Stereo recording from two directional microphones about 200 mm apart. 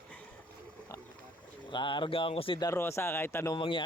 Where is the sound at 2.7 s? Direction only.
15° left (ahead or behind).